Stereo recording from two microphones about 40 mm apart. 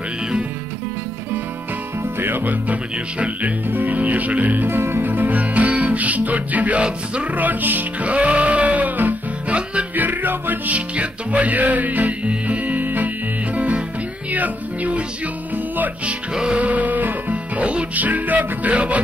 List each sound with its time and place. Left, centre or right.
2.1 s music: right
2.4 s music: right
3.6 s music: right
4.6 s music: right
5.0 s music: right
8.0 s music: right
9.5 s music: right
9.9 s music: right
11.0 s music: right
13.6 s music: right